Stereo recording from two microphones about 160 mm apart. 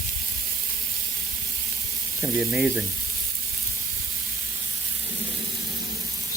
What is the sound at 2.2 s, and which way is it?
Speech, 5° right (ahead or behind).